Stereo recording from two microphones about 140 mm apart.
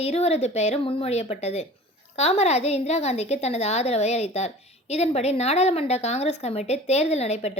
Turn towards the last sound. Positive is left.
turn(degrees=50)  # may be behind; listen again after turning